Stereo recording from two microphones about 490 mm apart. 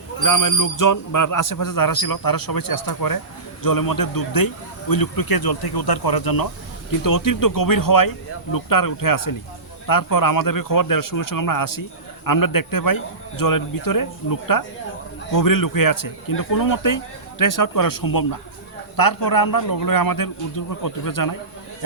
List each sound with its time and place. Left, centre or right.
0.2 s a man's voice: left